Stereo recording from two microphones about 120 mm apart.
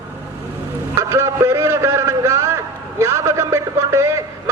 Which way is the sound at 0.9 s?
25° right (ahead or behind).